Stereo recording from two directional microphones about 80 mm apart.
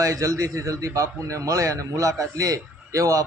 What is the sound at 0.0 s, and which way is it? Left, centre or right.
A man's voice, right.